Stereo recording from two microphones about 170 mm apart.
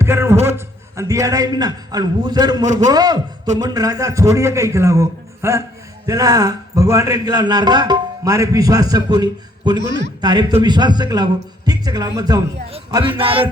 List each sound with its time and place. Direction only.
0.0 s a man's voice: 15° right (ahead or behind); by 13.5 s 30° right (ahead or behind)